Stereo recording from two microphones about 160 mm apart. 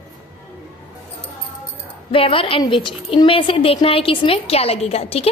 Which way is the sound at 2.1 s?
35° left (ahead or behind).